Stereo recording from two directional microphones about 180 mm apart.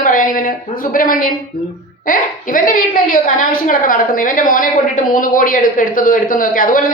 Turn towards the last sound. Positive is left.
turn(degrees=50)  # may be behind; listen again after turning